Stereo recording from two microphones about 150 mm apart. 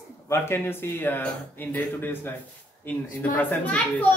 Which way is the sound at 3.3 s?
10° left (ahead or behind).